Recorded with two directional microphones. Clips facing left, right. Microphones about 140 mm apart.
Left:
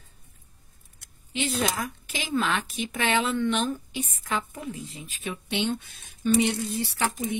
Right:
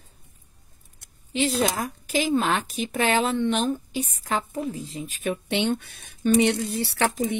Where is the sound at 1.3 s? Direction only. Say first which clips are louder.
Right 4 dB; 35° right (ahead or behind).